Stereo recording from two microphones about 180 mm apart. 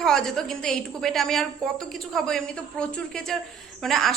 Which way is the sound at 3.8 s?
Centre (ahead or behind).